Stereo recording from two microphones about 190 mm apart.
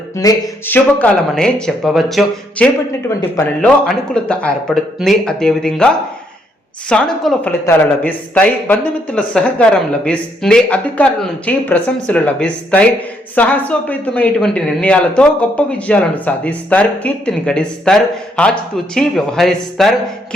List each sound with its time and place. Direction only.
0.2 s music: 20° left (ahead or behind)
0.9 s speech: 5° left (ahead or behind)
6.9 s speech: 5° left (ahead or behind)